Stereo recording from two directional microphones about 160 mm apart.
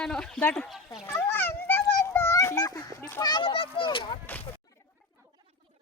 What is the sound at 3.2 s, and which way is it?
Speech, 30° left (ahead or behind).